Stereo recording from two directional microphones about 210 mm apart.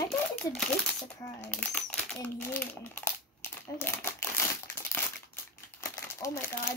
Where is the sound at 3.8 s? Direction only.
10° left (ahead or behind).